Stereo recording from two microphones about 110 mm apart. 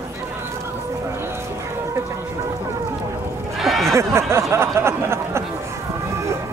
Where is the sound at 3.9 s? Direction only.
25° right (ahead or behind).